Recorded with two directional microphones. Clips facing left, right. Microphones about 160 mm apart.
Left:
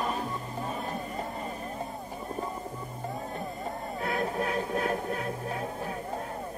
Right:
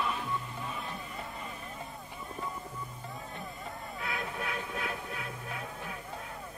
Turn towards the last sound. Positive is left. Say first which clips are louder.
# left 7 dB
turn(degrees=40)  # may be behind; listen again after turning